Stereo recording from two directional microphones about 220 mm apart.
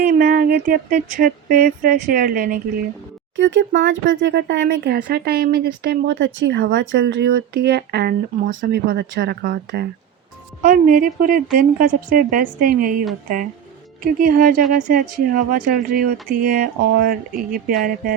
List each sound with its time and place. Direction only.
0.1 s speech: 40° right (ahead or behind)
3.3 s speech: 55° right (ahead or behind); by 17.7 s 40° right (ahead or behind)